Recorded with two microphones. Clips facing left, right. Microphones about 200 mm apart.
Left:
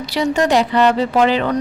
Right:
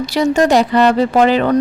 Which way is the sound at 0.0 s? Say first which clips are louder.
Right 4 dB; 45° right (ahead or behind).